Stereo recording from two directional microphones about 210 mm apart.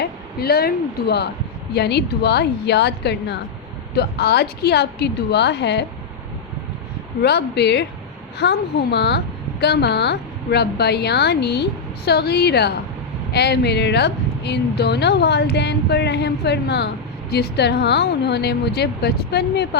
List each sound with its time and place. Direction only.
0.0 s speech: 50° left (ahead or behind)
7.2 s speech: 50° left (ahead or behind)